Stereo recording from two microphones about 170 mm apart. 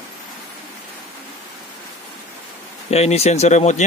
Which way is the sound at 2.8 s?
40° left (ahead or behind).